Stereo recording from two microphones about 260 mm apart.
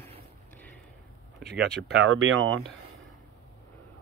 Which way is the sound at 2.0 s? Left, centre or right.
Right.